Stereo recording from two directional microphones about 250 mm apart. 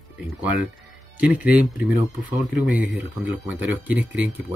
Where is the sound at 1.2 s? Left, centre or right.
Centre.